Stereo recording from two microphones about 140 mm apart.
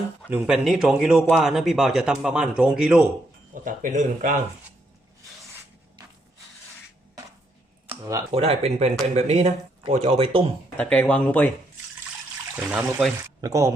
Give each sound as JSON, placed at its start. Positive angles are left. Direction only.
{"t": 0.3, "sound": "speech", "side_deg": -5}
{"t": 3.5, "sound": "speech", "side_deg": -70}
{"t": 7.9, "sound": "a sound", "side_deg": -20}
{"t": 8.3, "sound": "speech", "side_deg": -45}
{"t": 10.8, "sound": "speech", "side_deg": 10}
{"t": 12.7, "sound": "speech", "side_deg": 0}
{"t": 13.4, "sound": "speech", "side_deg": -20}